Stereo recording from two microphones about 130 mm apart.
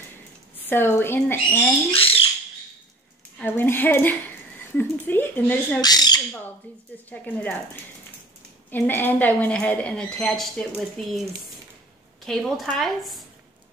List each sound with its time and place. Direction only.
0.7 s a woman's voice: 15° left (ahead or behind)
1.9 s rodents: 45° left (ahead or behind)
3.4 s a woman's voice: 15° left (ahead or behind)
5.8 s speech: 30° left (ahead or behind)
7.1 s a woman's voice: 15° left (ahead or behind)
8.6 s a woman's voice: 15° left (ahead or behind)
12.3 s speech: centre (ahead or behind)